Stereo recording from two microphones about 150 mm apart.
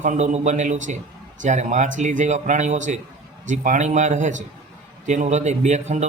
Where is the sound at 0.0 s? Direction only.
50° right (ahead or behind).